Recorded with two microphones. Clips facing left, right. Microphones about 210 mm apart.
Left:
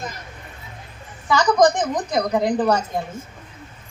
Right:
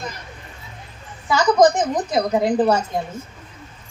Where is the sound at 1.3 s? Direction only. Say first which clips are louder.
Right 1 dB; 5° right (ahead or behind).